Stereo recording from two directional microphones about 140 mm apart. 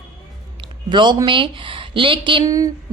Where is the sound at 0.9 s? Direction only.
35° right (ahead or behind).